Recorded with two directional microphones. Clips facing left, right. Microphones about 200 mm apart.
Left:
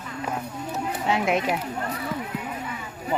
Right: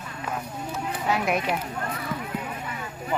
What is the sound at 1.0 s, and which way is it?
Speech, 25° left (ahead or behind).